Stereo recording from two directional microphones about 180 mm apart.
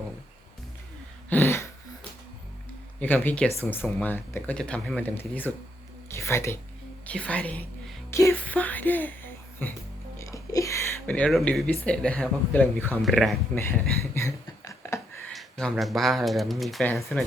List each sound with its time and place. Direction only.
1.3 s a sound: 10° left (ahead or behind)
3.0 s speech: 10° left (ahead or behind)
6.1 s a sound: 15° left (ahead or behind)
7.0 s speech: 5° left (ahead or behind)
10.2 s music: 20° left (ahead or behind)
11.9 s speech: 5° left (ahead or behind)
13.6 s speech: 15° left (ahead or behind)
15.3 s speech: centre (ahead or behind)